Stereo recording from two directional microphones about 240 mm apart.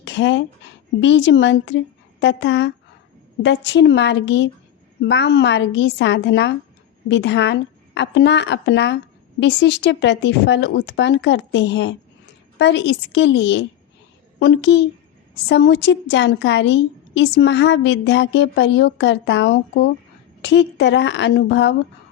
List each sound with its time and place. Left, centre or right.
0.0 s a woman's voice: left